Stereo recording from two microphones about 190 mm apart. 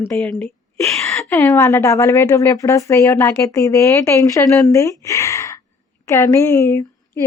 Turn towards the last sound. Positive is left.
turn(degrees=15)  # may be behind; listen again after turning